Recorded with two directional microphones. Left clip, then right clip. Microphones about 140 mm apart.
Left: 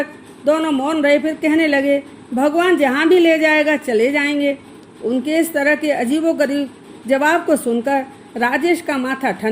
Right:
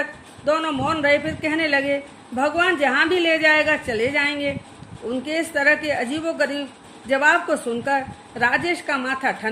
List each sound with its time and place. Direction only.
0.4 s speech: 50° left (ahead or behind)